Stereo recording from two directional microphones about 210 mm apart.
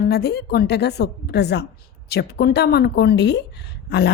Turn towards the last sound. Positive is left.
turn(degrees=50)  # may be behind; listen again after turning